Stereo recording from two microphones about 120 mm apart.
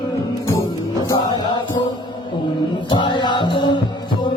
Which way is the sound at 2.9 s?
40° left (ahead or behind).